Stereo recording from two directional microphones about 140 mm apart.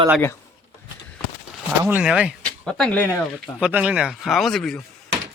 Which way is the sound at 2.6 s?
5° left (ahead or behind).